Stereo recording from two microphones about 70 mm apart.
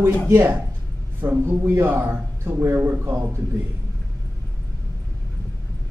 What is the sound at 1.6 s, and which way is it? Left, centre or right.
Speech, right.